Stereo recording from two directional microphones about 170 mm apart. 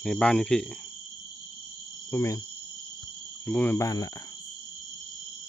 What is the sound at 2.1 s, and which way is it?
Speech, 15° left (ahead or behind).